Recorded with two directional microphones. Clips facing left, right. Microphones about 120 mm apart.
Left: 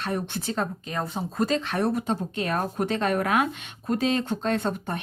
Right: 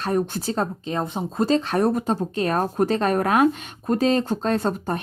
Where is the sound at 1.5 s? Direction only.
35° right (ahead or behind).